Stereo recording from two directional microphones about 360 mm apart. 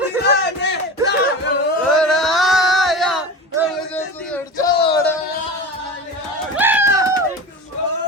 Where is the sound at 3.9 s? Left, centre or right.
Centre.